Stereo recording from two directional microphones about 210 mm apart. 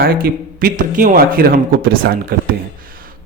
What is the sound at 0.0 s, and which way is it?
Speech, 45° right (ahead or behind).